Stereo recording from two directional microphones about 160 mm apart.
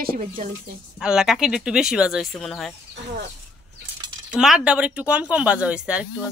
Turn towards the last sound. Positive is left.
turn(degrees=-5)  # may be behind; listen again after turning